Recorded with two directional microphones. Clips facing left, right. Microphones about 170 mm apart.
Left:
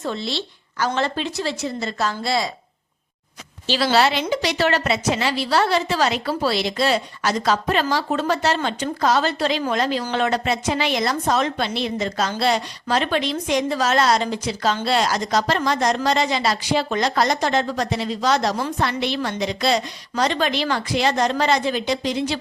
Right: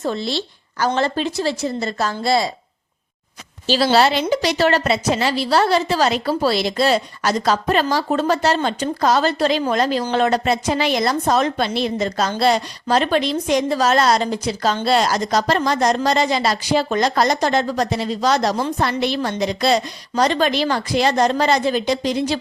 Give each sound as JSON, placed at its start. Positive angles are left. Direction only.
{"t": 0.0, "sound": "a woman's voice", "side_deg": -40}
{"t": 3.9, "sound": "a woman's voice", "side_deg": -35}